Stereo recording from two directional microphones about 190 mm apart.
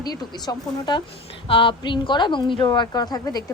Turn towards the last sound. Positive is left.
turn(degrees=20)  # may be behind; listen again after turning